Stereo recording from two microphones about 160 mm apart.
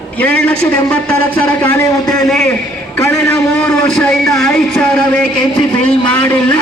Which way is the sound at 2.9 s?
15° left (ahead or behind).